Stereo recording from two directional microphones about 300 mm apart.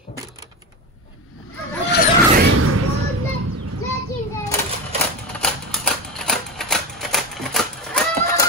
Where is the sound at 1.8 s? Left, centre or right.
Left.